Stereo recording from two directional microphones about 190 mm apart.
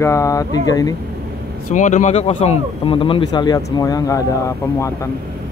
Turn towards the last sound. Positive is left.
turn(degrees=15)  # may be behind; listen again after turning